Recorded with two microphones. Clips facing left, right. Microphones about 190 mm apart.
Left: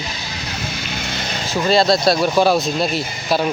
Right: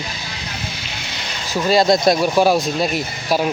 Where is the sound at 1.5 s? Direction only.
15° right (ahead or behind).